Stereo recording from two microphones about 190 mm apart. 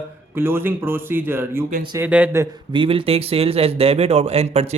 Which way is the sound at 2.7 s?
30° right (ahead or behind).